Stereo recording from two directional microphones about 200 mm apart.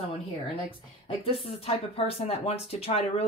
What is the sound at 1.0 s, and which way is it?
Speech, 30° left (ahead or behind).